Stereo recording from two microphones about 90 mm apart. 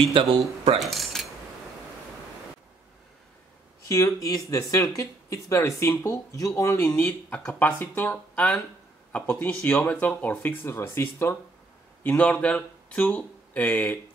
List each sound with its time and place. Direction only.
0.1 s speech: 75° right (ahead or behind)
0.7 s mechanisms: centre (ahead or behind)
3.8 s speech: 35° left (ahead or behind)
7.0 s speech: 15° left (ahead or behind)
12.0 s speech: 15° left (ahead or behind)